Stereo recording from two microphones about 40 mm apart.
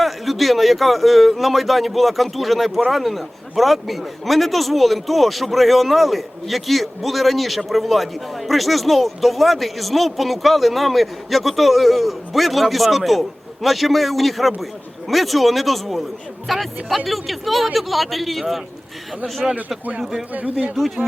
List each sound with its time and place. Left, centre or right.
0.0 s speech: centre
19.4 s speech: centre
20.3 s speech: right
20.7 s speech: centre